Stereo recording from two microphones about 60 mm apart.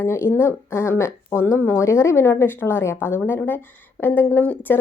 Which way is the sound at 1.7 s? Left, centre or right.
Left.